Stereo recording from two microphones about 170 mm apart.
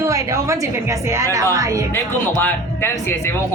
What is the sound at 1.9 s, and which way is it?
A man's voice, 10° left (ahead or behind).